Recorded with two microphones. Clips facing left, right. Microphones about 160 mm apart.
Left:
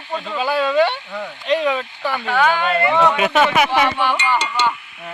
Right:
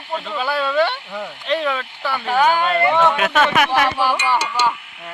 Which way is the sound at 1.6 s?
15° left (ahead or behind).